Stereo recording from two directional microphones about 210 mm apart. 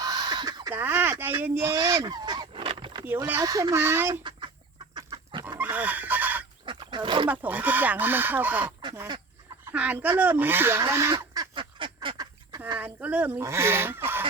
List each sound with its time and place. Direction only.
0.0 s a sound: 20° right (ahead or behind)
3.0 s speech: 10° right (ahead or behind)
4.9 s chicken: 20° right (ahead or behind)
5.5 s fowl: 5° right (ahead or behind)
6.7 s roaring cats: 20° right (ahead or behind)
7.3 s speech: 10° right (ahead or behind)
8.6 s duck: 20° right (ahead or behind)
9.7 s speech: 5° right (ahead or behind)
11.1 s duck: 25° right (ahead or behind)
12.8 s speech: 5° right (ahead or behind)